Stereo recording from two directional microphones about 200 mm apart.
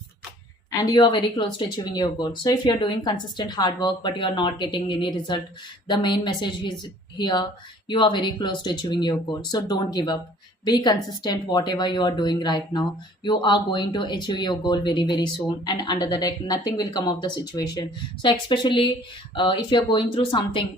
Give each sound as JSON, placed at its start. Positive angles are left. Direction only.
{"t": 0.7, "sound": "speech", "side_deg": 20}